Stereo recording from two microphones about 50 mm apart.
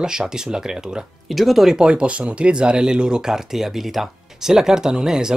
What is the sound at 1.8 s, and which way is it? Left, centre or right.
Speech, right.